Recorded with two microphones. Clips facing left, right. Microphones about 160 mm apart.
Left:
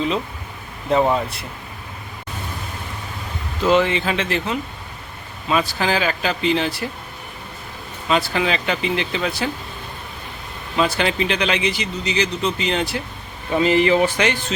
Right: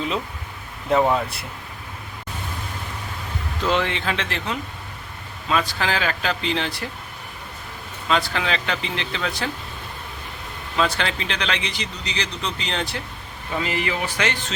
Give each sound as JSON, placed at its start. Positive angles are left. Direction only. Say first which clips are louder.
{"t": 0.9, "sound": "speech", "louder": "left 1 dB", "side_deg": 5}
{"t": 3.6, "sound": "speech", "louder": "left 6 dB", "side_deg": 5}
{"t": 8.0, "sound": "speech", "louder": "left 3 dB", "side_deg": 5}
{"t": 10.8, "sound": "speech", "louder": "left 4 dB", "side_deg": 10}
{"t": 13.6, "sound": "speech", "louder": "left 10 dB", "side_deg": 25}